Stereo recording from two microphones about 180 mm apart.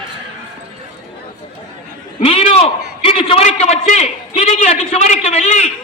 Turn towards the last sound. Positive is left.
turn(degrees=35)  # may be behind; listen again after turning